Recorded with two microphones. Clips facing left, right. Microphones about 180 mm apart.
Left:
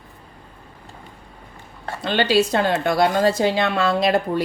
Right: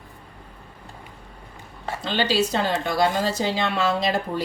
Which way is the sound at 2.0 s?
60° left (ahead or behind).